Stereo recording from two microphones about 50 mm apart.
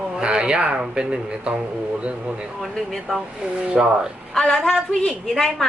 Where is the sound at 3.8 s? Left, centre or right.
Centre.